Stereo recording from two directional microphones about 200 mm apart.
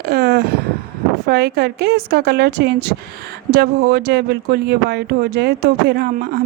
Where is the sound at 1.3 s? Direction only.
55° right (ahead or behind).